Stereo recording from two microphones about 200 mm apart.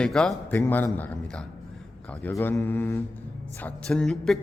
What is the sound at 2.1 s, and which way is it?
A man's voice, 10° left (ahead or behind).